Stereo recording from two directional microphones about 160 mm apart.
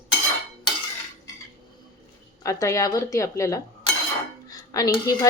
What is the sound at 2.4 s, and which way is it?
Speech, 20° left (ahead or behind).